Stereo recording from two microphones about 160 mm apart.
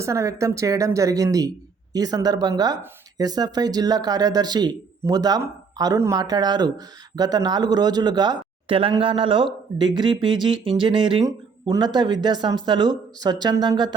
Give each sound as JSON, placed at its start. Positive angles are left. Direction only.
{"t": 0.0, "sound": "speech", "side_deg": -20}